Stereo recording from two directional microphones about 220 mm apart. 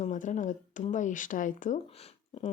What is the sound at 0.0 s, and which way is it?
Speech, 35° left (ahead or behind).